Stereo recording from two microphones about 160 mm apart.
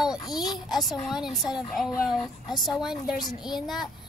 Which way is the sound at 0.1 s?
25° left (ahead or behind).